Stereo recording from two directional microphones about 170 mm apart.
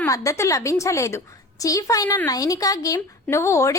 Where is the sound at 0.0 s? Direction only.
20° left (ahead or behind).